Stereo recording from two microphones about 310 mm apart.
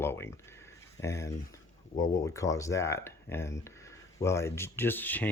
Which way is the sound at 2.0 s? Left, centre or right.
Centre.